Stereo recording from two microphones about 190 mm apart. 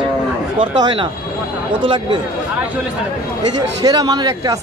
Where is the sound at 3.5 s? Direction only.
20° right (ahead or behind).